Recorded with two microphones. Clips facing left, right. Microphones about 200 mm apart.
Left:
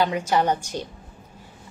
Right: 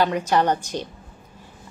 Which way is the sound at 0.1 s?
10° left (ahead or behind).